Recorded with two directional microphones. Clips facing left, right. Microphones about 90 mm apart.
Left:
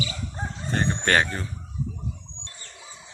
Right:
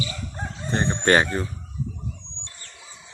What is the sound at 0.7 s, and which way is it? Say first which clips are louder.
Speech: right 4 dB; 20° right (ahead or behind).